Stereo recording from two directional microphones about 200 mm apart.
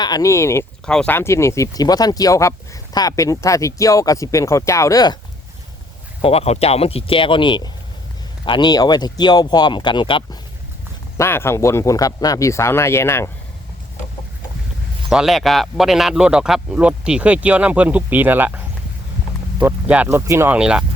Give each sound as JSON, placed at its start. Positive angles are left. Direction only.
{"t": 0.0, "sound": "speech", "side_deg": 20}
{"t": 6.2, "sound": "speech", "side_deg": 30}
{"t": 11.2, "sound": "speech", "side_deg": 10}
{"t": 15.1, "sound": "speech", "side_deg": 0}
{"t": 19.6, "sound": "speech", "side_deg": -10}